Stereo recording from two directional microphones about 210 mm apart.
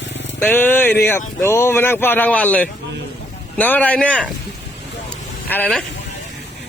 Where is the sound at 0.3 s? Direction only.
10° left (ahead or behind).